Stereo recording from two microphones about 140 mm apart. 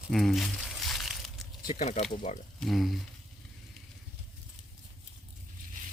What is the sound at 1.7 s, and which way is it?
Speech, 55° left (ahead or behind).